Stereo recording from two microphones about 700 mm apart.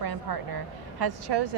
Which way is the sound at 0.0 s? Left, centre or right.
Right.